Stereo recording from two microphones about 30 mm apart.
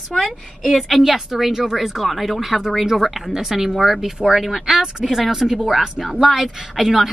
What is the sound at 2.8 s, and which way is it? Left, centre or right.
Speech, centre.